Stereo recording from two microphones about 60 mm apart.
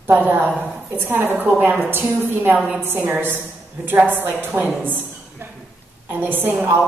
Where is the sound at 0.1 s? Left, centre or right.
Right.